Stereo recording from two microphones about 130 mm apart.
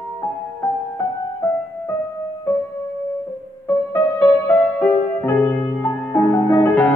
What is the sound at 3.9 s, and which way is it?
Music, 15° left (ahead or behind).